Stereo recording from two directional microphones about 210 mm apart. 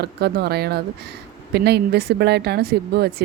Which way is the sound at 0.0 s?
50° right (ahead or behind).